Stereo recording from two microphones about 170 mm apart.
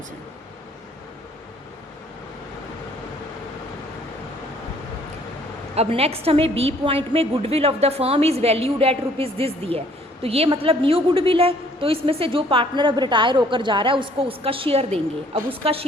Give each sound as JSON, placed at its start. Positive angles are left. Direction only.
{"t": 5.7, "sound": "a woman's voice", "side_deg": -35}